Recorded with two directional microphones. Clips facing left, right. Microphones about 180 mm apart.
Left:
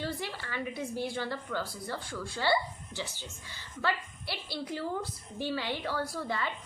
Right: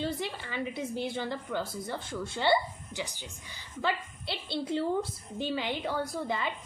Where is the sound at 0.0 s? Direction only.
20° right (ahead or behind).